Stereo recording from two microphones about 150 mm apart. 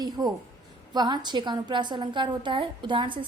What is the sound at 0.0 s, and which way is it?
A man's voice, 25° right (ahead or behind).